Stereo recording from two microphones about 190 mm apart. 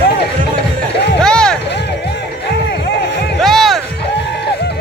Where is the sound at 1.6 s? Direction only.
60° left (ahead or behind).